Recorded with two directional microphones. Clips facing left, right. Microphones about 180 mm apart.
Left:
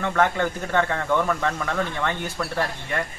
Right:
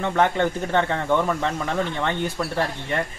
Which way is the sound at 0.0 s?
25° right (ahead or behind).